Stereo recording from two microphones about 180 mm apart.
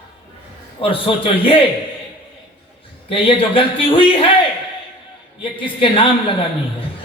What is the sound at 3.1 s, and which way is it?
A man's voice, 30° left (ahead or behind).